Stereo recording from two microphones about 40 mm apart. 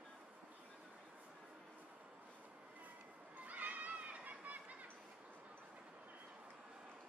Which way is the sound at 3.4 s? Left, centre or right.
Right.